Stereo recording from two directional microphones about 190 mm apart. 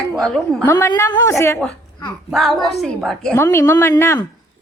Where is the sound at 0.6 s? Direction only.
15° left (ahead or behind).